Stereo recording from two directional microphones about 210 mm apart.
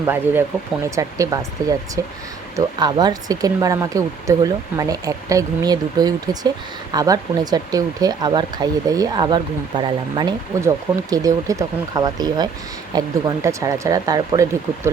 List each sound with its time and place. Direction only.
0.0 s speech: 10° right (ahead or behind)